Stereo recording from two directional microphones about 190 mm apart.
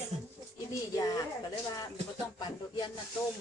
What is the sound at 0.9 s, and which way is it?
Speech, 20° left (ahead or behind).